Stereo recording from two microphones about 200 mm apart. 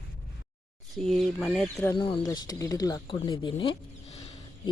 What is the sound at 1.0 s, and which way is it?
Speech, centre (ahead or behind).